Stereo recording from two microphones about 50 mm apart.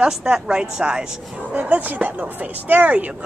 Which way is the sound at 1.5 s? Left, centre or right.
Right.